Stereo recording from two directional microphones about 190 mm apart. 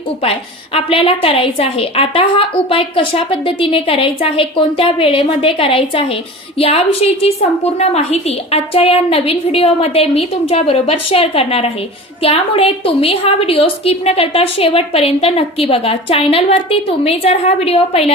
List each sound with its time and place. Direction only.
0.2 s a woman's voice: 30° left (ahead or behind)